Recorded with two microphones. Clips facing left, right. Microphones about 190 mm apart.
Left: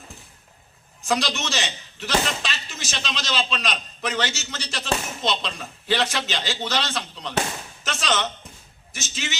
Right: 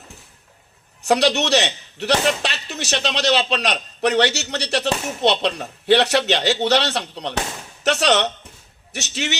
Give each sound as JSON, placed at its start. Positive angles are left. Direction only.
{"t": 1.0, "sound": "a man's voice", "side_deg": -70}